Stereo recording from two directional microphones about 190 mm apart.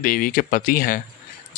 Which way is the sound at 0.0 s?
45° left (ahead or behind).